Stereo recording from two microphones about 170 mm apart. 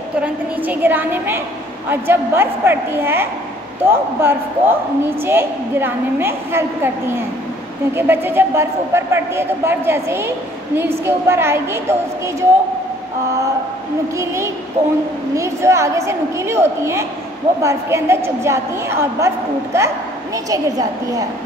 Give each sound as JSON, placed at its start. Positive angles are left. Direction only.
{"t": 0.2, "sound": "a woman's voice", "side_deg": -10}
{"t": 7.9, "sound": "a woman's voice", "side_deg": -15}
{"t": 14.1, "sound": "a woman's voice", "side_deg": -15}
{"t": 14.8, "sound": "a woman's voice", "side_deg": -40}
{"t": 15.3, "sound": "a woman's voice", "side_deg": -15}